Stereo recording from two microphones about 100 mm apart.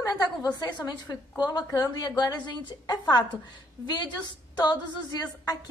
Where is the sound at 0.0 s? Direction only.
40° left (ahead or behind).